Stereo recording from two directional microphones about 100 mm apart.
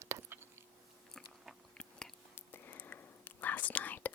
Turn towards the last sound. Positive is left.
turn(degrees=15)  # may be behind; listen again after turning